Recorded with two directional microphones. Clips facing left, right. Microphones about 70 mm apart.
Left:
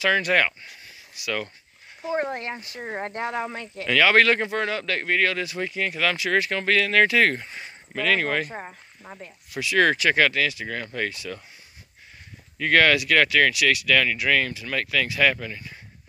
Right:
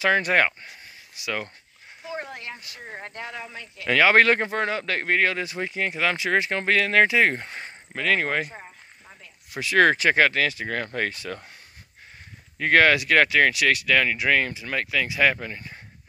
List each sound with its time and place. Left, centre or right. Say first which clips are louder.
0.0 s speech: right 1 dB; right
2.0 s speech: left 7 dB; left
2.8 s speech: left 8 dB; left
3.4 s speech: left 7 dB; left
3.8 s speech: right 1 dB; right
7.4 s speech: right 2 dB; right
7.9 s speech: left 1 dB; right
8.5 s cricket: left 6 dB; left
9.5 s speech: right 2 dB; right
12.5 s speech: right 1 dB; right